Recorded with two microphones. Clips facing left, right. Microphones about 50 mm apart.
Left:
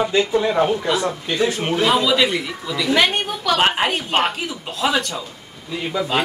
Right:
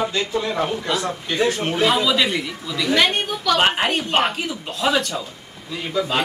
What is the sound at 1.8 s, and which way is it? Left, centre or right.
A woman's voice, centre.